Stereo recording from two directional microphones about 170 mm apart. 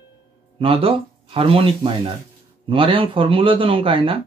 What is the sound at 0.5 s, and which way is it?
Speech, 35° right (ahead or behind).